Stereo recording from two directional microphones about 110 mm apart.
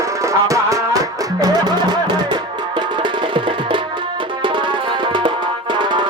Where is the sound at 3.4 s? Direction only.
50° right (ahead or behind).